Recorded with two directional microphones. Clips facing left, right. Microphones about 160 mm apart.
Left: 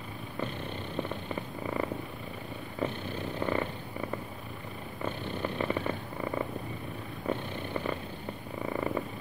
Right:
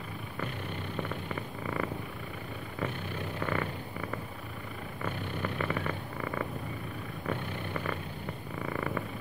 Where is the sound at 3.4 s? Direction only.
25° left (ahead or behind).